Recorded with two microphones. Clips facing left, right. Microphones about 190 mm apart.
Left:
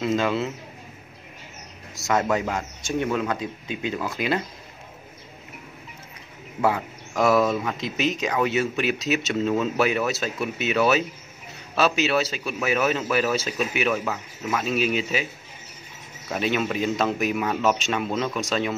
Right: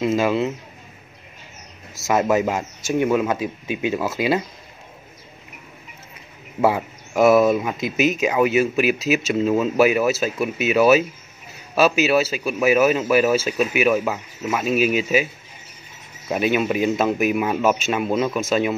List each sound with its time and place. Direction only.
0.1 s a man's voice: 10° right (ahead or behind)
2.0 s a man's voice: 20° right (ahead or behind)
6.6 s a man's voice: 10° right (ahead or behind)
7.7 s a man's voice: 5° right (ahead or behind)
16.3 s a man's voice: 10° right (ahead or behind)